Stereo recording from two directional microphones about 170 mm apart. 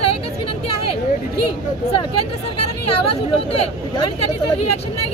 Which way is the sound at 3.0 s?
35° left (ahead or behind).